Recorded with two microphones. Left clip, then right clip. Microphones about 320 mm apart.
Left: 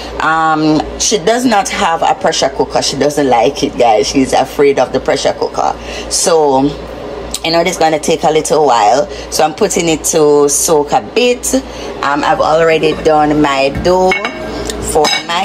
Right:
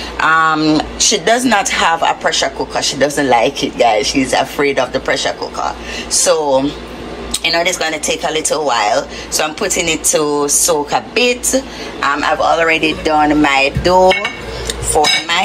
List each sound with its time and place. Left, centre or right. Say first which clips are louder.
0.2 s speech: even; centre